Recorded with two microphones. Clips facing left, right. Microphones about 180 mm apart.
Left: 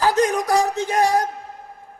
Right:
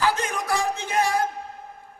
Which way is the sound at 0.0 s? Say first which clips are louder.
Left 7 dB; 40° left (ahead or behind).